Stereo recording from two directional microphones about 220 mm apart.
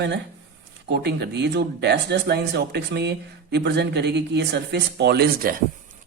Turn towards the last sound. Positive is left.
turn(degrees=-50)  # may be behind; listen again after turning